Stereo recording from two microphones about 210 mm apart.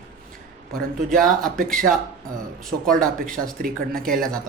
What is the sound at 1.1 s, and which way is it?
Speech, centre (ahead or behind).